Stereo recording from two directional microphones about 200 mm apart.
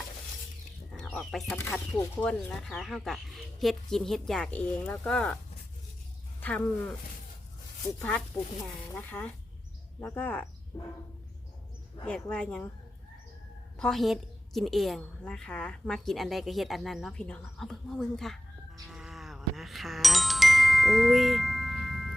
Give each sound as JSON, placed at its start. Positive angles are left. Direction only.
{"t": 0.9, "sound": "a sound", "side_deg": 0}
{"t": 2.0, "sound": "speech", "side_deg": 15}
{"t": 2.5, "sound": "a woman's voice", "side_deg": 0}
{"t": 6.4, "sound": "speech", "side_deg": 10}
{"t": 8.9, "sound": "speech", "side_deg": 10}
{"t": 10.7, "sound": "bird", "side_deg": 20}
{"t": 12.0, "sound": "a woman's voice", "side_deg": 5}
{"t": 13.7, "sound": "a woman's voice", "side_deg": 0}
{"t": 18.9, "sound": "glockenspiel", "side_deg": 0}